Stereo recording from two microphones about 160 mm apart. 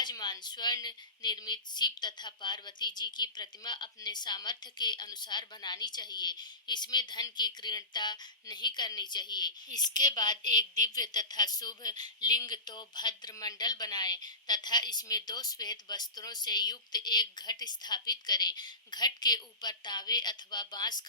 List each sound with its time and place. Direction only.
0.0 s a woman's voice: 25° left (ahead or behind)